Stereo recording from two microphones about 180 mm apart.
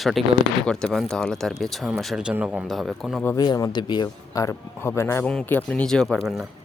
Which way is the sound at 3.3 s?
20° left (ahead or behind).